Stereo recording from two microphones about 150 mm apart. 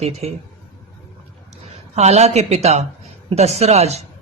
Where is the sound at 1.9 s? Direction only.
45° right (ahead or behind).